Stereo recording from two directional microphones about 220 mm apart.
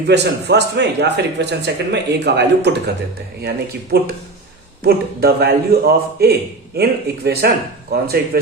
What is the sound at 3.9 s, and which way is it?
A man's voice, 45° right (ahead or behind).